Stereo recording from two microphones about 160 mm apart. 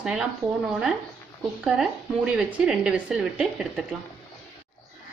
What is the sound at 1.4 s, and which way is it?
Speech, 5° right (ahead or behind).